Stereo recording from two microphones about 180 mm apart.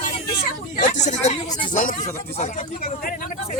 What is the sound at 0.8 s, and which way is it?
Speech, 45° left (ahead or behind).